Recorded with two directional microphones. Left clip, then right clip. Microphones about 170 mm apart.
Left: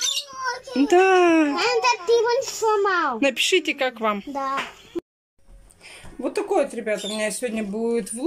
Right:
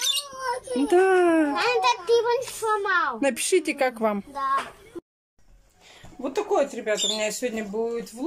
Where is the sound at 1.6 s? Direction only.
30° left (ahead or behind).